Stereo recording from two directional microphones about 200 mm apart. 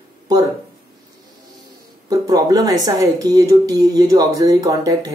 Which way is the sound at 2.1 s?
20° right (ahead or behind).